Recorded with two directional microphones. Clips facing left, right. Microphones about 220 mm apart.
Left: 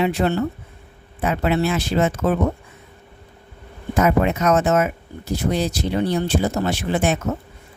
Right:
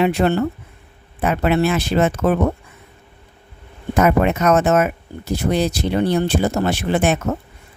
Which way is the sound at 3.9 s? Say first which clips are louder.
Right 2 dB; 60° right (ahead or behind).